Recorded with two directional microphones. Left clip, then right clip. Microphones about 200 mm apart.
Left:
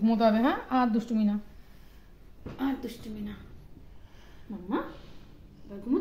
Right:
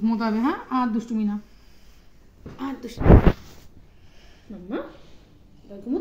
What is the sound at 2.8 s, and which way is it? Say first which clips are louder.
Speech: right 2 dB; 10° left (ahead or behind).